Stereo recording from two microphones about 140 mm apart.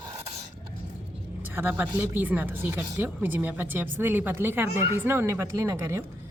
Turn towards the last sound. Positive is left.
turn(degrees=-20)  # may be behind; listen again after turning